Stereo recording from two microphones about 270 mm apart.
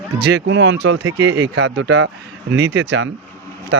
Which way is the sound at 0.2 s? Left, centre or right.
Right.